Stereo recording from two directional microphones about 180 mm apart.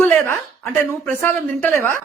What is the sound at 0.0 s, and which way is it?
Speech, 10° left (ahead or behind).